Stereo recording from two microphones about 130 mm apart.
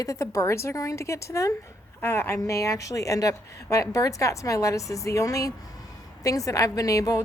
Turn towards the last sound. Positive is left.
turn(degrees=25)  # may be behind; listen again after turning